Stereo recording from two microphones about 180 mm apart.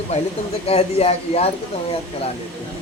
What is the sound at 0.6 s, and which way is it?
Speech, 35° left (ahead or behind).